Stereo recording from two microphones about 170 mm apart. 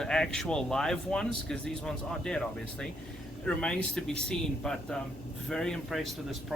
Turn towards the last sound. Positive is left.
turn(degrees=5)  # may be behind; listen again after turning